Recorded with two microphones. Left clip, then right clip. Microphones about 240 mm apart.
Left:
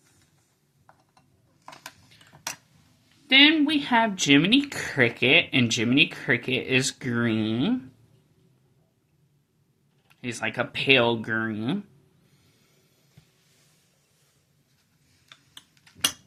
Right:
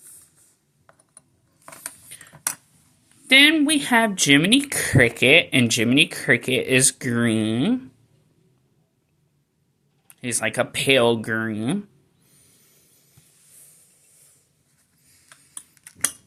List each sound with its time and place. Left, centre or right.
2.1 s a sound: right
3.2 s speech: right
10.1 s speech: right